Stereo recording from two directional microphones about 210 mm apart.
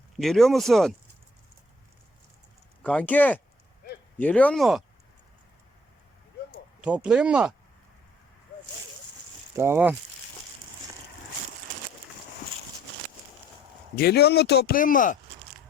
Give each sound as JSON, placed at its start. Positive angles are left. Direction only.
{"t": 0.2, "sound": "speech", "side_deg": 0}
{"t": 2.8, "sound": "speech", "side_deg": 5}
{"t": 6.8, "sound": "speech", "side_deg": -5}
{"t": 9.6, "sound": "speech", "side_deg": -10}
{"t": 13.9, "sound": "a man's voice", "side_deg": 50}